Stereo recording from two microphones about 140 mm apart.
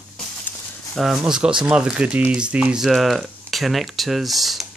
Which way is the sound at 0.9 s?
Centre (ahead or behind).